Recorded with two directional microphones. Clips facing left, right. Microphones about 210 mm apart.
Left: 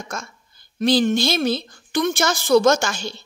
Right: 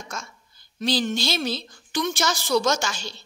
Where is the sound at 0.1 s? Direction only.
55° left (ahead or behind).